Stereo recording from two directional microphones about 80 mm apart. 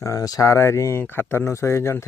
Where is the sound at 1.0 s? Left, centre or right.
Left.